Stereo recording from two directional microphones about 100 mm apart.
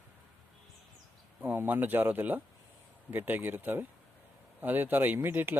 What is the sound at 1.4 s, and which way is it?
Speech, 20° right (ahead or behind).